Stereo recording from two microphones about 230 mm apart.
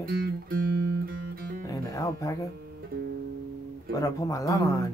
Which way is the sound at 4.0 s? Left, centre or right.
Centre.